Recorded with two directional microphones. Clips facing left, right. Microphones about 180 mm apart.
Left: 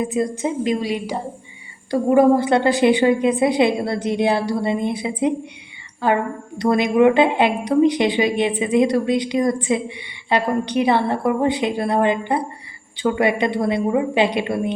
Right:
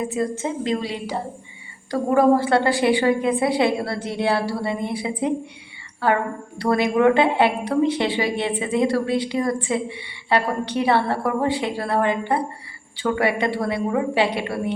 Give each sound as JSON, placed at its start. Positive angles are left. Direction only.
{"t": 0.0, "sound": "a woman's voice", "side_deg": 15}